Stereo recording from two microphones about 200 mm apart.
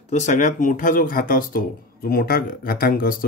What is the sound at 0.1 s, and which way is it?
Speech, 35° left (ahead or behind).